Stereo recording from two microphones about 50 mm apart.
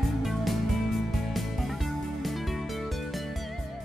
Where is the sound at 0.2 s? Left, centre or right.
Centre.